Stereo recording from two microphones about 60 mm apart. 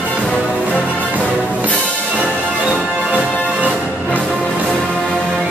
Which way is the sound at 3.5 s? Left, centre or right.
Centre.